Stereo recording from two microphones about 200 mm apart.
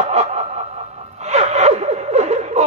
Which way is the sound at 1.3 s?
35° right (ahead or behind).